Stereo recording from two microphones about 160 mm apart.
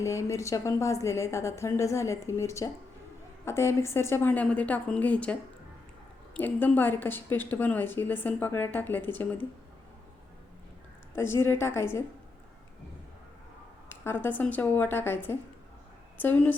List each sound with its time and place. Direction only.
0.0 s a woman's voice: 20° left (ahead or behind)
11.1 s a woman's voice: 15° left (ahead or behind)
13.9 s a woman's voice: 15° left (ahead or behind)